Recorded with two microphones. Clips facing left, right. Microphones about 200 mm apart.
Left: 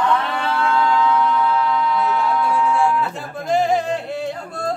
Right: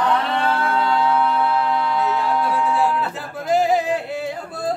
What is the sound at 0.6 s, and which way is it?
Music, 35° right (ahead or behind).